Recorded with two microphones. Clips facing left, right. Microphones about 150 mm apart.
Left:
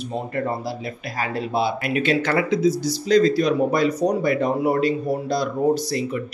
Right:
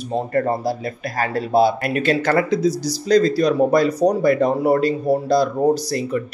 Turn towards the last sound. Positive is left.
turn(degrees=-40)  # may be behind; listen again after turning